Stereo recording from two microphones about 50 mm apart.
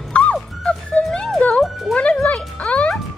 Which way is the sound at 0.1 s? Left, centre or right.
Left.